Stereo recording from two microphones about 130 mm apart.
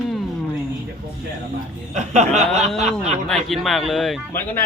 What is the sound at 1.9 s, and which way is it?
Speech, 60° right (ahead or behind).